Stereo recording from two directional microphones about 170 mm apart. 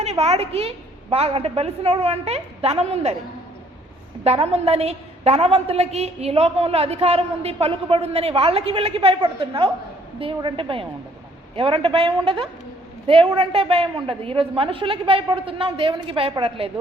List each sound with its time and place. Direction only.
0.0 s a woman's voice: 40° right (ahead or behind)
4.2 s a woman's voice: 40° right (ahead or behind)